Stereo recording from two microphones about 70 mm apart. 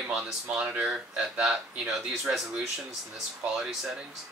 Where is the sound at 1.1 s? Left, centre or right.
Centre.